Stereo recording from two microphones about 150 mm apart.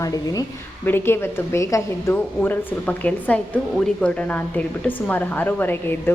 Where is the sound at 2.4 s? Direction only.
10° left (ahead or behind).